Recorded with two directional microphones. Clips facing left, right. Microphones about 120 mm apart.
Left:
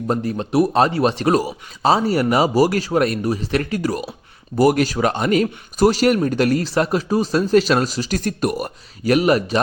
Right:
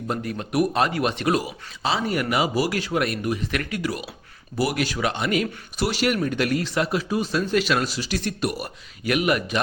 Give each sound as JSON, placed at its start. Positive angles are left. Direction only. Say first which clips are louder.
{"t": 0.1, "sound": "a man's voice", "louder": "left 6 dB", "side_deg": 30}